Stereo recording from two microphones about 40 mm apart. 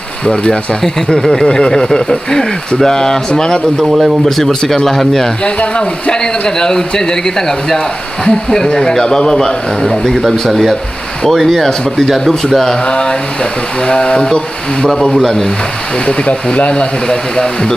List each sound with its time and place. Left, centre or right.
0.2 s speech: left
4.4 s speech: centre
5.4 s speech: left
10.5 s speech: centre
12.8 s speech: left
15.1 s speech: centre
16.1 s speech: left
17.1 s speech: centre